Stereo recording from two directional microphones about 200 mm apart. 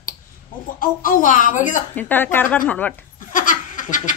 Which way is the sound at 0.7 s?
45° left (ahead or behind).